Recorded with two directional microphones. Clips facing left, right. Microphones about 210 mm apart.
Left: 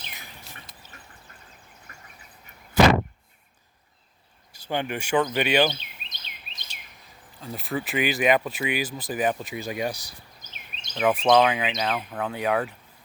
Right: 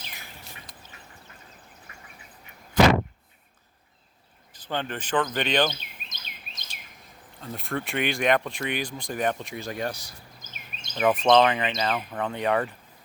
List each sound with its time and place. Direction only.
4.5 s speech: 10° left (ahead or behind)
6.0 s chirp: 45° right (ahead or behind)
7.4 s speech: centre (ahead or behind)
10.4 s a sound: 50° right (ahead or behind)
10.9 s speech: 5° right (ahead or behind)